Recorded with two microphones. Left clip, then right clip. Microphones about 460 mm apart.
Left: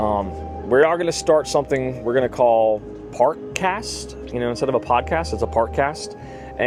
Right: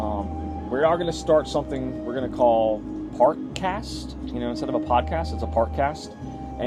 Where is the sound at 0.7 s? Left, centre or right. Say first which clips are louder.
Left 5 dB; left.